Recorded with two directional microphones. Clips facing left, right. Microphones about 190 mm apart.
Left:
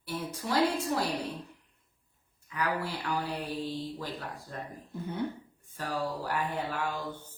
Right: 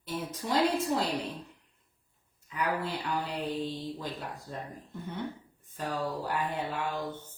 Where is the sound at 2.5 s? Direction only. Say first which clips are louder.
Right 1 dB; 20° right (ahead or behind).